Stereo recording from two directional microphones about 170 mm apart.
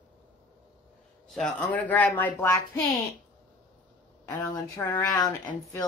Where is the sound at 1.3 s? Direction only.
5° left (ahead or behind).